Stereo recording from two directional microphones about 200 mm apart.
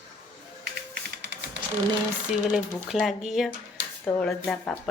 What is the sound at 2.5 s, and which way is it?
A woman's voice, centre (ahead or behind).